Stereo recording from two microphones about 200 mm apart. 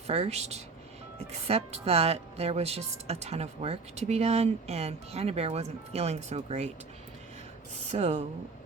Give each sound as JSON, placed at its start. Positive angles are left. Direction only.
{"t": 0.1, "sound": "a woman's voice", "side_deg": -30}
{"t": 7.9, "sound": "a woman's voice", "side_deg": -30}